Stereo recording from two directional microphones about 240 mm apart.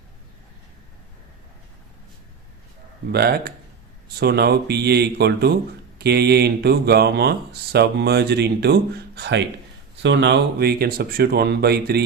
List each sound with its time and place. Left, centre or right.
3.1 s speech: right